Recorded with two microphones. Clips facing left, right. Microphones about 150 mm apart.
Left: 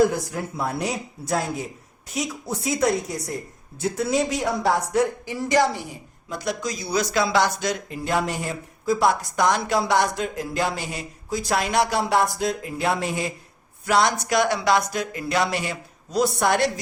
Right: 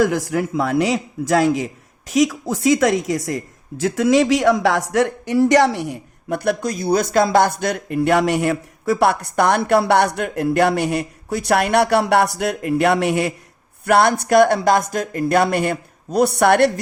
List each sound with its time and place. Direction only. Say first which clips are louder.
0.0 s speech: right 3 dB; 90° right; by 13.3 s 70° right (ahead or behind)
13.8 s speech: right 5 dB; 60° right (ahead or behind)